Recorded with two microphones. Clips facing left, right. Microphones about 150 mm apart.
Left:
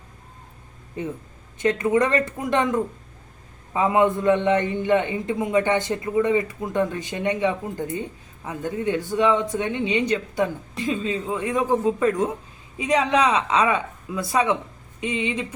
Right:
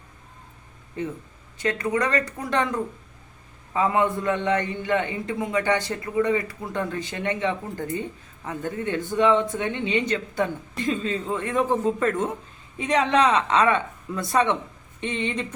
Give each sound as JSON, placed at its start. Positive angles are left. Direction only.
{"t": 1.0, "sound": "a man's voice", "side_deg": 15}